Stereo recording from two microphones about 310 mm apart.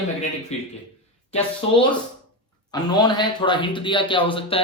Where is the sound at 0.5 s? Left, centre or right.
Left.